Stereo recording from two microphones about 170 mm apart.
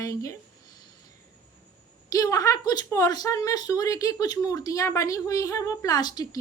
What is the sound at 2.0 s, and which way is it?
A woman's voice, 20° left (ahead or behind).